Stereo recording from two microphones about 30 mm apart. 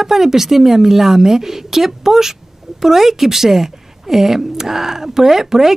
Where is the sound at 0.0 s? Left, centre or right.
Centre.